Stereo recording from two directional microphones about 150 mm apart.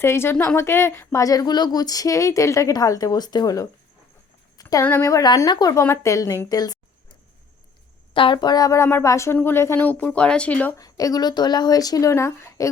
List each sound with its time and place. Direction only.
0.0 s speech: 15° left (ahead or behind)
8.1 s speech: 35° left (ahead or behind); by 10.8 s 10° left (ahead or behind)
10.8 s speech: 25° left (ahead or behind)